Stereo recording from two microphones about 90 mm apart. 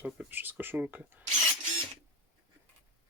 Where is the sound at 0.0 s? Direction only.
15° right (ahead or behind).